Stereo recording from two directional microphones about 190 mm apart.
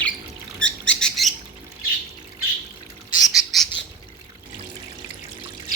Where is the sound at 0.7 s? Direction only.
5° left (ahead or behind).